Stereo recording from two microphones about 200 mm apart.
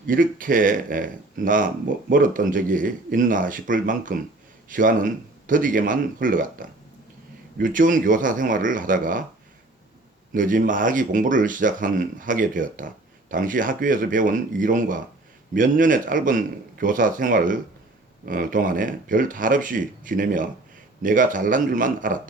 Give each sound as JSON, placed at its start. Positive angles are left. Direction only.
{"t": 0.1, "sound": "speech", "side_deg": -45}
{"t": 10.3, "sound": "speech", "side_deg": -40}